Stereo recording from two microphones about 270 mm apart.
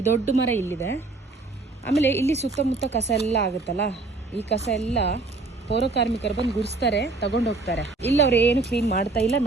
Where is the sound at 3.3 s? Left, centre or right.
Left.